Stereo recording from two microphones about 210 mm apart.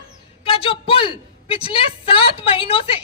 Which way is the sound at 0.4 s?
25° left (ahead or behind).